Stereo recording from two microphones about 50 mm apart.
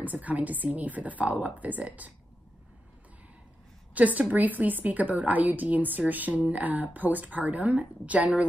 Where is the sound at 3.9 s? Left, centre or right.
Right.